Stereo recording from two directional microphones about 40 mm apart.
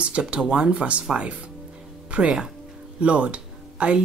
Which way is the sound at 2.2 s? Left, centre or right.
Right.